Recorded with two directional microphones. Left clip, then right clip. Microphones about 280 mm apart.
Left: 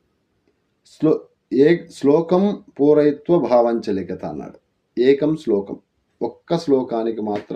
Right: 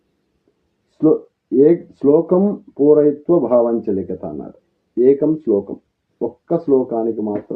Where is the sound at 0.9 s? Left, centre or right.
Centre.